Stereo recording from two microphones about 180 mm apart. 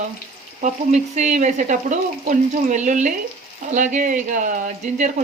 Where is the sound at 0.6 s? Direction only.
40° right (ahead or behind).